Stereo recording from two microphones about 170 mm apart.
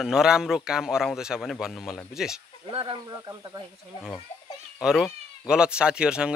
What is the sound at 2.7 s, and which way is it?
Speech, 30° right (ahead or behind).